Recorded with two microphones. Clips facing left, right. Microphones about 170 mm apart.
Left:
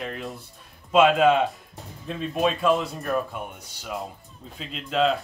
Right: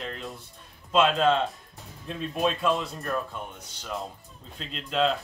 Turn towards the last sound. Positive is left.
turn(degrees=0)  # may be behind; listen again after turning